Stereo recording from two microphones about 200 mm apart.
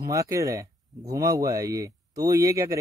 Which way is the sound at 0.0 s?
15° right (ahead or behind).